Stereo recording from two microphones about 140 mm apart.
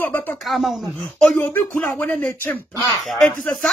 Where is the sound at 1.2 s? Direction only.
10° left (ahead or behind).